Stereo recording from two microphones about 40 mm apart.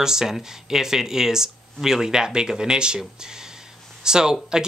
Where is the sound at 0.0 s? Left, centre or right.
Centre.